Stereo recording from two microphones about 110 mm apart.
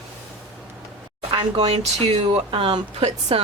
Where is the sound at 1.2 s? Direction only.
60° right (ahead or behind).